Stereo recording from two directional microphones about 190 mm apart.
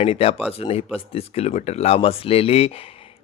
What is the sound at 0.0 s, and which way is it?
Speech, 35° left (ahead or behind).